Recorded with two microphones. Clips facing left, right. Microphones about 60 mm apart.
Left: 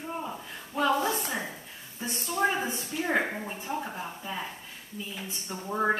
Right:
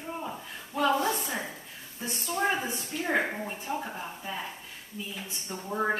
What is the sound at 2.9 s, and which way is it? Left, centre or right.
Speech, centre.